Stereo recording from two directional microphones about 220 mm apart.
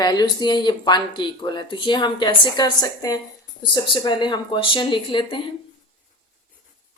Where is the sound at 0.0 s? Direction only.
20° left (ahead or behind).